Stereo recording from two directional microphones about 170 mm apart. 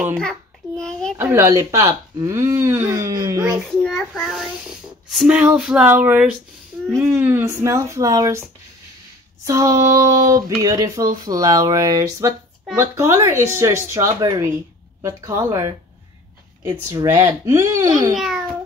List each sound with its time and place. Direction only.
0.2 s a sound: 5° left (ahead or behind)
1.1 s speech: 15° right (ahead or behind)
3.5 s a child's voice: centre (ahead or behind); by 15.7 s 15° right (ahead or behind)
16.9 s speech: 15° right (ahead or behind)
18.1 s a child's voice: centre (ahead or behind)